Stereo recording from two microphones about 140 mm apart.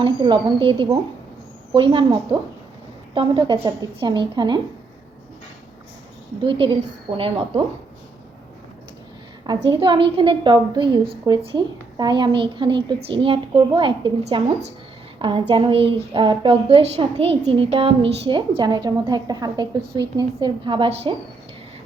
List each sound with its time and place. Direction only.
0.0 s a woman's voice: 35° right (ahead or behind)
6.4 s a woman's voice: 40° right (ahead or behind)
9.5 s a woman's voice: 30° right (ahead or behind)